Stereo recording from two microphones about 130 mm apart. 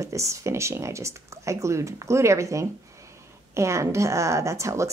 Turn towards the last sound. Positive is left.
turn(degrees=-25)  # may be behind; listen again after turning